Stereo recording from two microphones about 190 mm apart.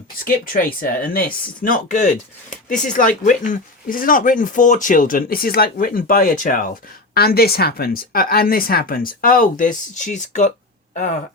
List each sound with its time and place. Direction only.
0.5 s speech: 50° left (ahead or behind)